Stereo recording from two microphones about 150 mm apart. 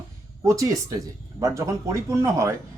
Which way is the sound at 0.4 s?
20° right (ahead or behind).